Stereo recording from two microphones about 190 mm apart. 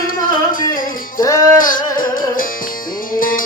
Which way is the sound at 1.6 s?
45° left (ahead or behind).